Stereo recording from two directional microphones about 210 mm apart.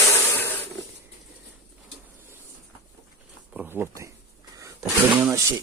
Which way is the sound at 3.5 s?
5° right (ahead or behind).